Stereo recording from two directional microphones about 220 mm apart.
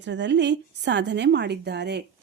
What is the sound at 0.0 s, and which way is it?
A woman's voice, 55° right (ahead or behind).